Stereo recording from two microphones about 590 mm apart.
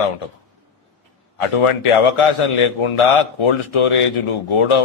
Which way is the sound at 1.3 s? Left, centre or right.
Left.